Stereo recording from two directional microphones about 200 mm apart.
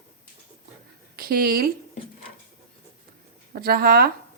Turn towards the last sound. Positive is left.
turn(degrees=-50)  # may be behind; listen again after turning